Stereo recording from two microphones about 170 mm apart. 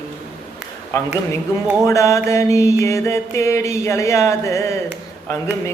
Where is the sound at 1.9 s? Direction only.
15° left (ahead or behind).